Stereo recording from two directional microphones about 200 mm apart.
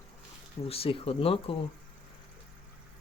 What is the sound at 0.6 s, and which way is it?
Speech, 30° left (ahead or behind).